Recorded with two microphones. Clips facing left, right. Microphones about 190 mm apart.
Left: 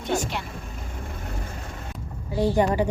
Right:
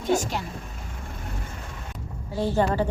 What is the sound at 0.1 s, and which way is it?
Speech, 40° right (ahead or behind).